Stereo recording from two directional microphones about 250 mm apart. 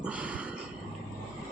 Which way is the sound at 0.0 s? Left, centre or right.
Centre.